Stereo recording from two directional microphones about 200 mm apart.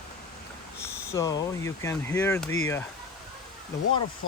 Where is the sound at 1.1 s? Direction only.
15° left (ahead or behind).